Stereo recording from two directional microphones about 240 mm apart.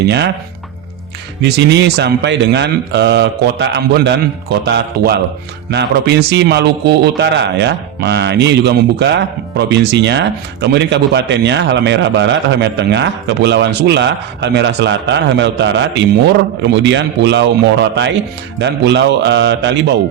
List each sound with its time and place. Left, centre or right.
0.0 s a man's voice: right
1.4 s a man's voice: right